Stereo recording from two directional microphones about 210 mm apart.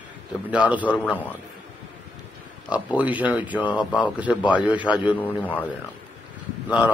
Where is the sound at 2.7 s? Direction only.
5° right (ahead or behind).